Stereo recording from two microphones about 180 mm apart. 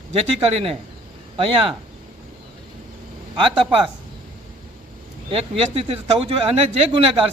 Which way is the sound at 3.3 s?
25° right (ahead or behind).